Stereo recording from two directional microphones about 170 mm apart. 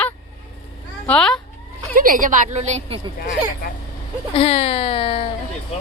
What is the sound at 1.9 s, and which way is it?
A woman's voice, 55° right (ahead or behind).